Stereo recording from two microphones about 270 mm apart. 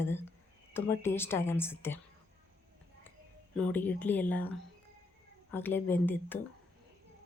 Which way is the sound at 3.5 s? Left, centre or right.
Centre.